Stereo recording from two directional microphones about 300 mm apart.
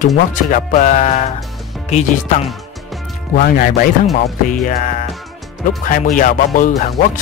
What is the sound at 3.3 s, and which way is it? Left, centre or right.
Speech, left.